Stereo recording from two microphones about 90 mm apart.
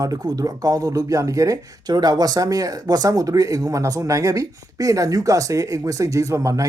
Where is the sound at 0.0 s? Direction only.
45° right (ahead or behind).